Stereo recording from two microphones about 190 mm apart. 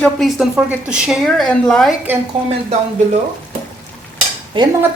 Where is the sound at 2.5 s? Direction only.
35° right (ahead or behind).